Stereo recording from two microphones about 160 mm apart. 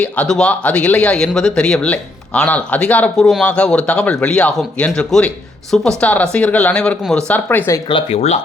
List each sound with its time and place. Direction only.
0.0 s speech: 5° left (ahead or behind)
7.9 s speech: 35° left (ahead or behind)